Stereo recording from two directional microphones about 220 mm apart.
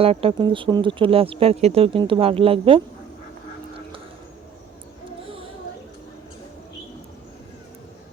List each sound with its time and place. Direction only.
0.0 s speech: 25° right (ahead or behind)